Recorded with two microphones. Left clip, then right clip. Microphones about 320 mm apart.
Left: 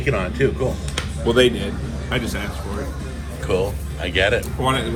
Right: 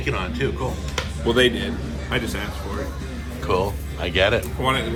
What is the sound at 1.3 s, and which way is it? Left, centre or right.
A man's voice, centre.